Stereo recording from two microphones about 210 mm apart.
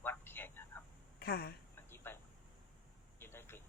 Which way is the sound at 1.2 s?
45° left (ahead or behind).